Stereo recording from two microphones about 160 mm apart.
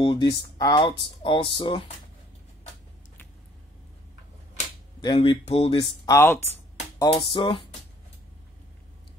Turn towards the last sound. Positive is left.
turn(degrees=30)  # may be behind; listen again after turning